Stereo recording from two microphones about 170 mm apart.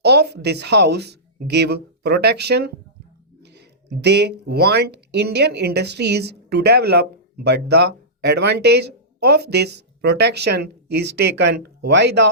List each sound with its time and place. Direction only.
0.0 s speech: 75° right (ahead or behind)